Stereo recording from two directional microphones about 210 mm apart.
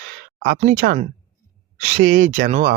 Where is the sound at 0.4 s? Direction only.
45° right (ahead or behind).